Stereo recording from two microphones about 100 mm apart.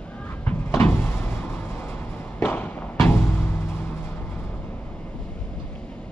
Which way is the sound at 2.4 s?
15° left (ahead or behind).